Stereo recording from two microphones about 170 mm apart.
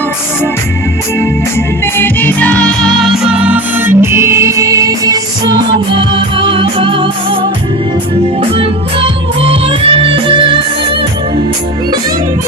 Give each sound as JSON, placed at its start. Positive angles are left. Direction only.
{"t": 2.0, "sound": "music", "side_deg": 10}
{"t": 8.4, "sound": "music", "side_deg": -35}